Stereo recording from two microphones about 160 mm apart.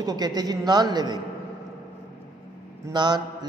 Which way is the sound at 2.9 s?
25° right (ahead or behind).